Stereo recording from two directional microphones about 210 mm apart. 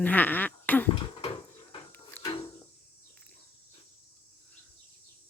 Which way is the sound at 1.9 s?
10° left (ahead or behind).